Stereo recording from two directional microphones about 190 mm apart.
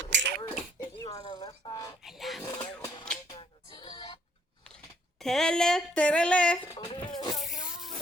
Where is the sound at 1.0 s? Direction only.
20° left (ahead or behind).